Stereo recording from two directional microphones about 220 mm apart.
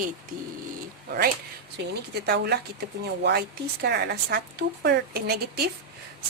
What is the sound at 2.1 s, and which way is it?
Speech, 45° right (ahead or behind).